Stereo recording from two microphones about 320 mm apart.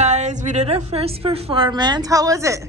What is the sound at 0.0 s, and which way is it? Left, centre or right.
A woman's voice, right.